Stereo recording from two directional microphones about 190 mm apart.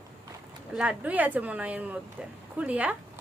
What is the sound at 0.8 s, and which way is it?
A woman's voice, 5° right (ahead or behind).